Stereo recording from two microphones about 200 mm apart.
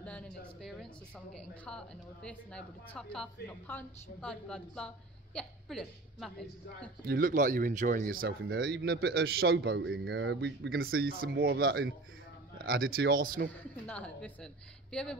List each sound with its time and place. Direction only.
0.0 s a sound: 5° left (ahead or behind)
1.3 s a woman's voice: 5° left (ahead or behind)
7.1 s speech: 40° right (ahead or behind)
13.5 s a woman's voice: 5° left (ahead or behind)